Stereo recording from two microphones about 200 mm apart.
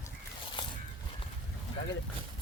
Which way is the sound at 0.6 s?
25° left (ahead or behind).